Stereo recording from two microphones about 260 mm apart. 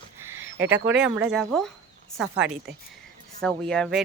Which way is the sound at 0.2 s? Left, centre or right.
Centre.